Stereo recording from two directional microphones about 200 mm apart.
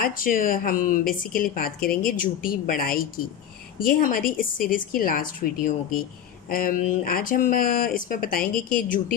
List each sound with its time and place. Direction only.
0.0 s speech: 45° left (ahead or behind)